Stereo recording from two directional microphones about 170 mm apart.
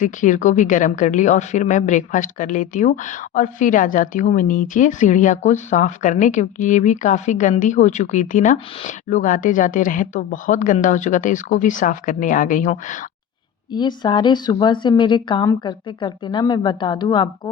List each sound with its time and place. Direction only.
0.0 s a woman's voice: 50° left (ahead or behind)
13.7 s a woman's voice: 25° left (ahead or behind)